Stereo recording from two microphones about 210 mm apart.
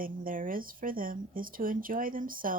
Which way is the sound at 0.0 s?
40° right (ahead or behind).